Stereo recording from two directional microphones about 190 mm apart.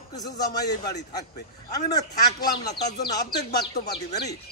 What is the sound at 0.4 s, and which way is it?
Speech, 20° left (ahead or behind).